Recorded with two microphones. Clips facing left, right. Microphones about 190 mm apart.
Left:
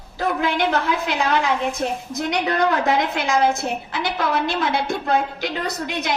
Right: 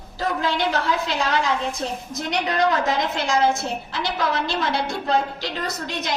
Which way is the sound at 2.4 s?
60° left (ahead or behind).